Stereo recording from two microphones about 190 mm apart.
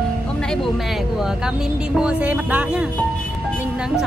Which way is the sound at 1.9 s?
5° right (ahead or behind).